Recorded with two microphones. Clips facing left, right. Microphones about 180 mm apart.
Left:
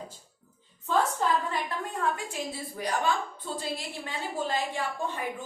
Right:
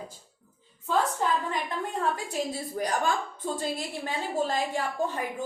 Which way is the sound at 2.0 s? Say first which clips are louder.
Right 2 dB; 40° right (ahead or behind).